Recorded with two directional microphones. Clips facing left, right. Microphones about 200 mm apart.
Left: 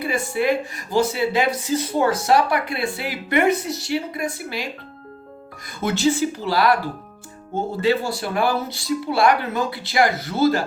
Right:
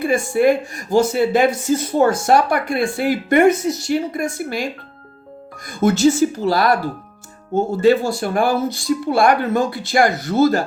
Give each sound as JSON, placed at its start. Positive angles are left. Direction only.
{"t": 0.0, "sound": "speech", "side_deg": -45}
{"t": 5.6, "sound": "speech", "side_deg": -45}